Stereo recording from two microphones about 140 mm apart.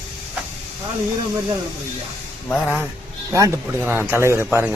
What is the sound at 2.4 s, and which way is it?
Speech, 10° left (ahead or behind).